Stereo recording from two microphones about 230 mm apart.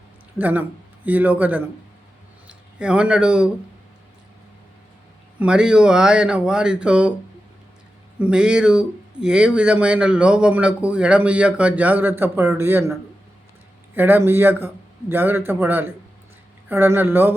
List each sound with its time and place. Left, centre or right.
0.3 s a man's voice: centre
5.4 s speech: centre
8.2 s a man's voice: centre